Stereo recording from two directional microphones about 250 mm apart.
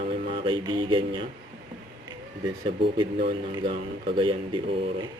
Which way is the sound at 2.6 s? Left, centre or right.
Centre.